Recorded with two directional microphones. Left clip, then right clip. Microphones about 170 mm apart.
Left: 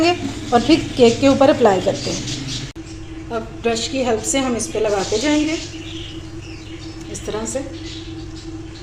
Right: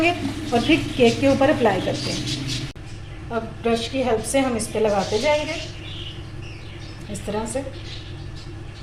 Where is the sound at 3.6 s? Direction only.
40° left (ahead or behind).